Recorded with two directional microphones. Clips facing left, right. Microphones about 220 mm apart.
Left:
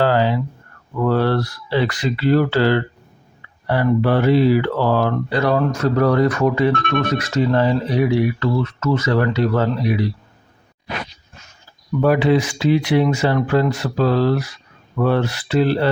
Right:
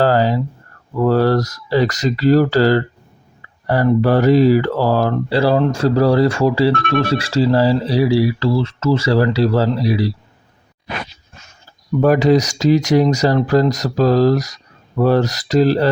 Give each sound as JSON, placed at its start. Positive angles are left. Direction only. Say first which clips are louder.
{"t": 0.0, "sound": "a sound", "louder": "right 2 dB", "side_deg": -40}
{"t": 0.9, "sound": "speech", "louder": "right 3 dB", "side_deg": -40}
{"t": 12.0, "sound": "speech", "louder": "right 3 dB", "side_deg": -40}